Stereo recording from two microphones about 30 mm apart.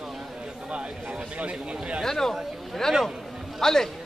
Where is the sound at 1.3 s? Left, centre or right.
Right.